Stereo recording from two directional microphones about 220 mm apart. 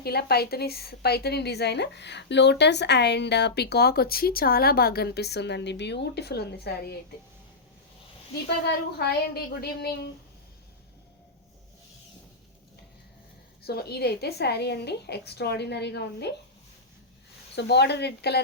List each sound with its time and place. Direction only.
0.0 s a woman's voice: 45° left (ahead or behind)
8.4 s a woman's voice: 45° left (ahead or behind)
13.7 s a woman's voice: 45° left (ahead or behind)
17.5 s a woman's voice: 50° left (ahead or behind)